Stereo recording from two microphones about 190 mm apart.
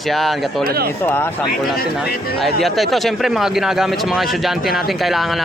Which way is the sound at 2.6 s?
Centre (ahead or behind).